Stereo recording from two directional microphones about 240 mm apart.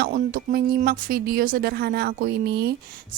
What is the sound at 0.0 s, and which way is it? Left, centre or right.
Speech, right.